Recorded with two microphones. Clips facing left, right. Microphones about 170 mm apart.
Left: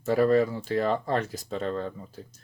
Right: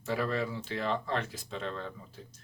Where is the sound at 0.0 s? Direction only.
45° left (ahead or behind).